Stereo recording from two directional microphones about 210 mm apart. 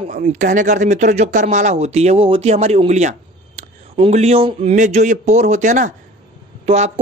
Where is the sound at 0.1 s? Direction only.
35° right (ahead or behind).